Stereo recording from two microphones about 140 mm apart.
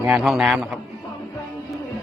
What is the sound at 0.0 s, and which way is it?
Speech, 5° right (ahead or behind).